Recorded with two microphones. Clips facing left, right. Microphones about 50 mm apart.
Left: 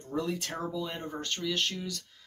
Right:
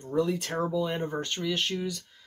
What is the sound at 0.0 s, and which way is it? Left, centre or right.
Speech, centre.